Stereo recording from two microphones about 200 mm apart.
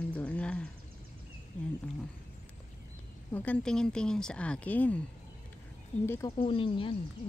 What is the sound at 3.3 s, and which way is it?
Speech, 10° left (ahead or behind).